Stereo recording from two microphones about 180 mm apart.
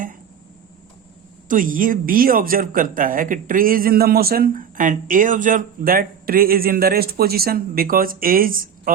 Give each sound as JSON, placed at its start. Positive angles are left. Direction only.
{"t": 1.5, "sound": "speech", "side_deg": -50}